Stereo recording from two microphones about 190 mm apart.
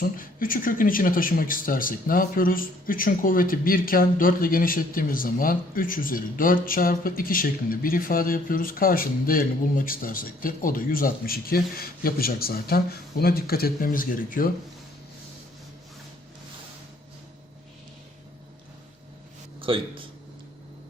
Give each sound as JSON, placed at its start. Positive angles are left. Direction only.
{"t": 0.0, "sound": "speech", "side_deg": 45}
{"t": 19.6, "sound": "a man's voice", "side_deg": -30}